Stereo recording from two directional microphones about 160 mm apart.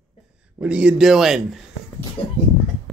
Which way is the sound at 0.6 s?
5° right (ahead or behind).